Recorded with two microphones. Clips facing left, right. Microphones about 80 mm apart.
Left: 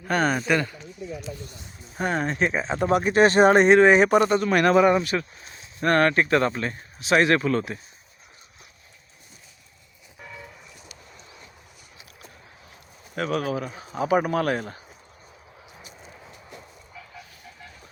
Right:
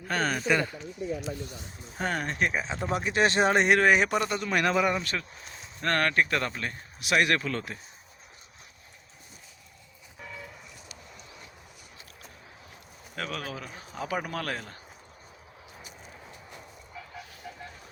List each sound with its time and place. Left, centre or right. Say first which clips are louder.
0.1 s speech: left 6 dB; left
2.1 s speech: left 5 dB; left
2.7 s speech: left 8 dB; left
3.1 s speech: left 7 dB; left
3.7 s a man's voice: left 7 dB; left
4.0 s speech: left 9 dB; left
5.8 s a man's voice: left 6 dB; left
10.2 s a sound: left 1 dB; centre
13.1 s a man's voice: left 9 dB; left